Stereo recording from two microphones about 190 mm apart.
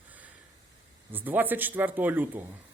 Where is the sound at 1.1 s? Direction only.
10° right (ahead or behind).